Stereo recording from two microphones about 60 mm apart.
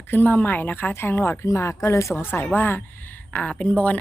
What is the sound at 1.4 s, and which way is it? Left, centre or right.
Speech, left.